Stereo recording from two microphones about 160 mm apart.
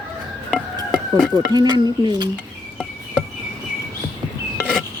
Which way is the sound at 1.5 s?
25° right (ahead or behind).